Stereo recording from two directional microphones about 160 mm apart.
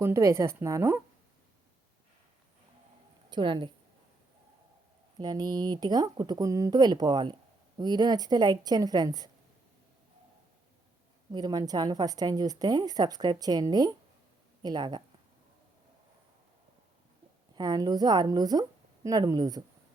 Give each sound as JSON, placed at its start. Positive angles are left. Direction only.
{"t": 0.0, "sound": "a woman's voice", "side_deg": -20}
{"t": 3.2, "sound": "a woman's voice", "side_deg": -30}
{"t": 5.1, "sound": "a woman's voice", "side_deg": -25}
{"t": 11.3, "sound": "a woman's voice", "side_deg": -25}
{"t": 17.5, "sound": "a woman's voice", "side_deg": -25}